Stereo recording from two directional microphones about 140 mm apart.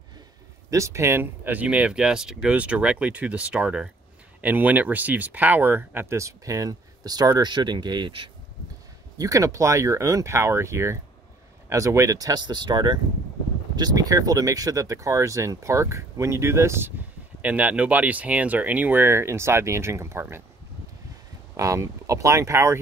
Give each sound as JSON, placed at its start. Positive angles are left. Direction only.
{"t": 0.7, "sound": "speech", "side_deg": -20}
{"t": 9.2, "sound": "speech", "side_deg": -25}
{"t": 21.5, "sound": "speech", "side_deg": -25}